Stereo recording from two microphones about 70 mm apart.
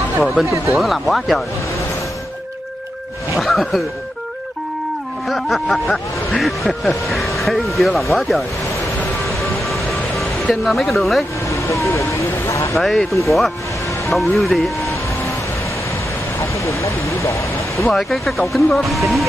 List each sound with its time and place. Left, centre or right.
0.2 s speech: centre
3.3 s speech: centre
5.3 s speech: centre
9.4 s music: centre
11.5 s speech: left
12.7 s speech: centre
16.3 s speech: left
17.8 s speech: centre